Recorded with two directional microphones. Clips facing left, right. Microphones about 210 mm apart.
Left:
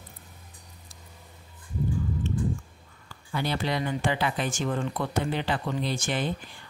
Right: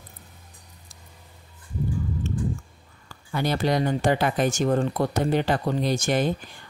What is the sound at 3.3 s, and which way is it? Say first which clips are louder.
Speech: right 5 dB; 45° right (ahead or behind).